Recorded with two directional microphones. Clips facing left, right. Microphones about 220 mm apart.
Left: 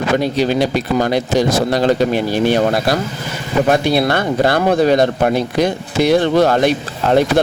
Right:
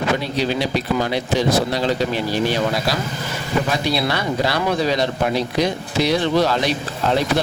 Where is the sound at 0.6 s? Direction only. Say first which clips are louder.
Left 5 dB; 45° left (ahead or behind).